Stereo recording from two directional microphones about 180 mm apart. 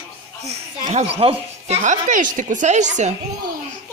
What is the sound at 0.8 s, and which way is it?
A woman's voice, 35° right (ahead or behind).